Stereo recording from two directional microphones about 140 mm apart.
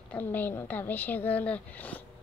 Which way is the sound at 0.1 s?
15° left (ahead or behind).